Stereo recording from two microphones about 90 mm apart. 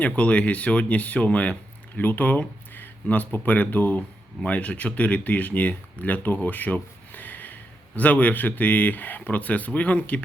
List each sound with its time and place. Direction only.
0.0 s speech: 15° left (ahead or behind)